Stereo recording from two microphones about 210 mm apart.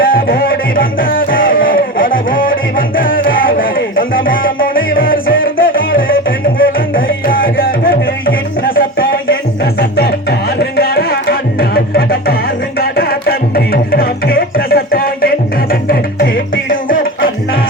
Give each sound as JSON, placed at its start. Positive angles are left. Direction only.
{"t": 0.0, "sound": "music", "side_deg": 45}
{"t": 10.6, "sound": "music", "side_deg": 45}